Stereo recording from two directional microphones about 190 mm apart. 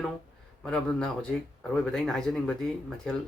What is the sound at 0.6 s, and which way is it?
Speech, 5° left (ahead or behind).